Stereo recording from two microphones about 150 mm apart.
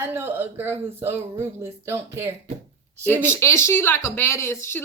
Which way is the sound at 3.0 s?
15° left (ahead or behind).